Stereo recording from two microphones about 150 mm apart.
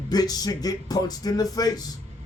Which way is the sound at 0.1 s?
25° left (ahead or behind).